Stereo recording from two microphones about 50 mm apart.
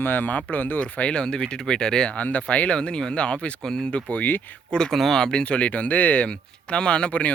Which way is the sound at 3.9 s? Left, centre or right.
Left.